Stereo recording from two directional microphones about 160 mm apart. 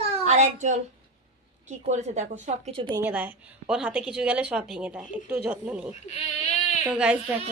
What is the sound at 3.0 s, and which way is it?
A woman's voice, 10° right (ahead or behind).